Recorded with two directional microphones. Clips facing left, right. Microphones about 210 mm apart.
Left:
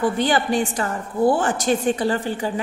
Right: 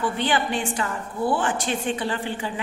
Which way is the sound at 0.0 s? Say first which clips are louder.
Left 4 dB; 40° left (ahead or behind).